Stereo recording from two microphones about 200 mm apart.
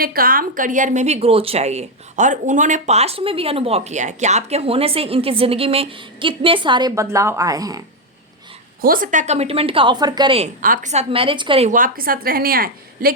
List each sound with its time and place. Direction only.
0.0 s a woman's voice: 45° right (ahead or behind); by 7.9 s 20° right (ahead or behind)
8.8 s a woman's voice: 45° right (ahead or behind); by 10.5 s 25° right (ahead or behind)
10.6 s a woman's voice: 40° right (ahead or behind)
11.7 s a woman's voice: 45° right (ahead or behind)